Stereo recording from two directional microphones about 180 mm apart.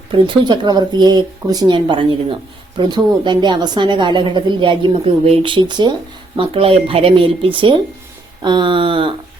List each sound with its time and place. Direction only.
0.1 s speech: 25° right (ahead or behind)